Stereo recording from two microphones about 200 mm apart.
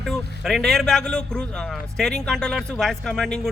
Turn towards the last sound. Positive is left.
turn(degrees=0)  # may be behind; listen again after turning